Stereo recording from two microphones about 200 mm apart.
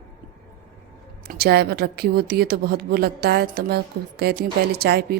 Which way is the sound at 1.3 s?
50° right (ahead or behind).